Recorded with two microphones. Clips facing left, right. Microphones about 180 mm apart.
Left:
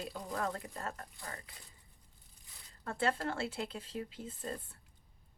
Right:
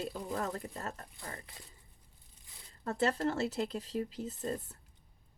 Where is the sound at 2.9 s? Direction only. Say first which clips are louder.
Right 3 dB; 40° right (ahead or behind).